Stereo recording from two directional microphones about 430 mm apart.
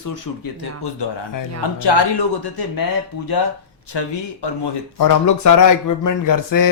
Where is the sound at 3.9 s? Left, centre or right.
Left.